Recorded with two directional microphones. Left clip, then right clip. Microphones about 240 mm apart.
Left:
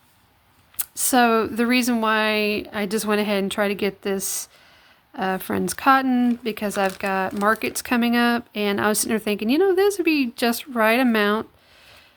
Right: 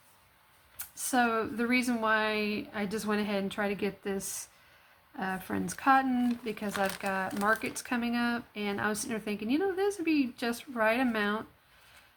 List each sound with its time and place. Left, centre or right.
0.8 s speech: left